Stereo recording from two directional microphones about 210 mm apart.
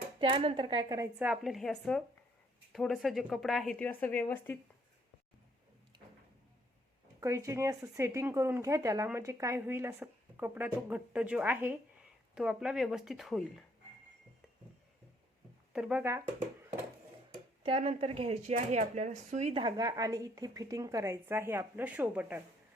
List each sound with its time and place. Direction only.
0.2 s speech: 25° right (ahead or behind); by 4.5 s 10° left (ahead or behind)
7.2 s speech: 15° right (ahead or behind)
15.7 s speech: 5° right (ahead or behind)
17.6 s speech: 30° right (ahead or behind); by 22.4 s 5° right (ahead or behind)